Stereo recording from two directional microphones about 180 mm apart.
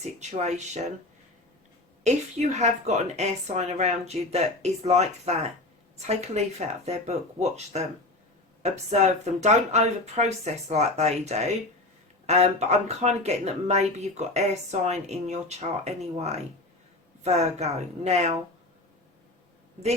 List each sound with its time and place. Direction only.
0.0 s a woman's voice: 40° right (ahead or behind)
2.0 s a woman's voice: 40° right (ahead or behind)